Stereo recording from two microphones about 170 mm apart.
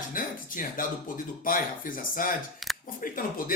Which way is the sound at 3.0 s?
55° left (ahead or behind).